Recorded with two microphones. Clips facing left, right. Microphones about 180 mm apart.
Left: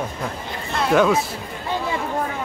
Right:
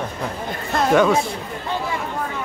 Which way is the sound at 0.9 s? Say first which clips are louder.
Right 1 dB; centre (ahead or behind).